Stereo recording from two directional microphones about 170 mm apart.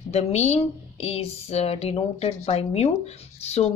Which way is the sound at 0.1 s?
40° left (ahead or behind).